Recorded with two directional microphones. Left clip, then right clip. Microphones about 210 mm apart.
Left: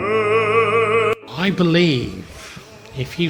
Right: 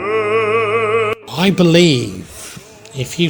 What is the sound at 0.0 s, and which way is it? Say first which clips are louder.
Opera: right 1 dB; centre (ahead or behind).